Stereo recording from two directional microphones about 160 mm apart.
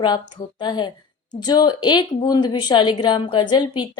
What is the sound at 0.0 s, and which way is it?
A woman's voice, 25° left (ahead or behind).